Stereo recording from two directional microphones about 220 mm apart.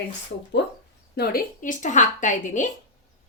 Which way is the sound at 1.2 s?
45° left (ahead or behind).